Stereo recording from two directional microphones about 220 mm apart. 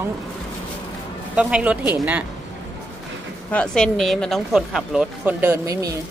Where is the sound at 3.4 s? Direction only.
5° left (ahead or behind); by 5.9 s 15° right (ahead or behind).